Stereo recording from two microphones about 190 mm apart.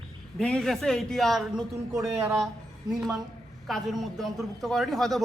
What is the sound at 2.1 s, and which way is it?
Speech, 15° right (ahead or behind).